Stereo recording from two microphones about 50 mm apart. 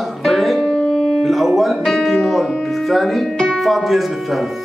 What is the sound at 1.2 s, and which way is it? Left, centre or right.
Music, centre.